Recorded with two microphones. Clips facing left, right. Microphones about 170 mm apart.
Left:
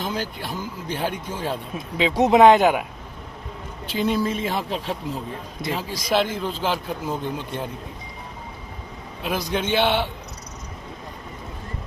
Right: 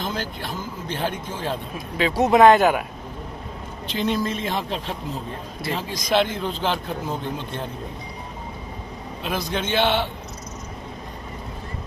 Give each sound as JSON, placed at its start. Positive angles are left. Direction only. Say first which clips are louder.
{"t": 0.0, "sound": "a man's voice", "louder": "left 1 dB", "side_deg": 10}
{"t": 3.8, "sound": "a man's voice", "louder": "left 1 dB", "side_deg": 10}
{"t": 9.2, "sound": "a man's voice", "louder": "left 2 dB", "side_deg": 10}